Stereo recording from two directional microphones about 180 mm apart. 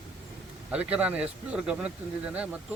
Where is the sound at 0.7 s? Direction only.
5° right (ahead or behind).